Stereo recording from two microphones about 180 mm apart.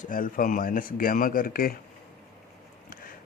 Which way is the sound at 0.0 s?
50° left (ahead or behind).